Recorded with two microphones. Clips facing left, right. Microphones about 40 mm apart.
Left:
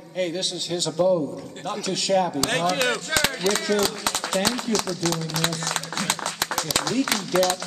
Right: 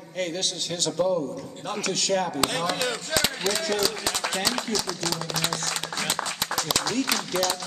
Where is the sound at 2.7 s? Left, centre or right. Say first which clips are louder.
Left 4 dB; left.